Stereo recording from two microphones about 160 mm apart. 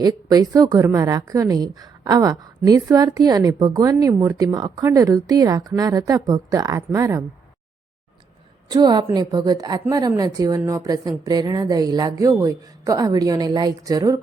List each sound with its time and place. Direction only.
0.0 s a woman's voice: 25° right (ahead or behind)
8.7 s a woman's voice: 25° right (ahead or behind)